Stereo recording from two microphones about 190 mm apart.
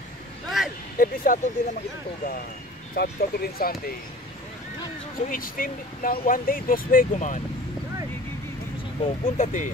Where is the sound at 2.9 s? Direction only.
55° left (ahead or behind).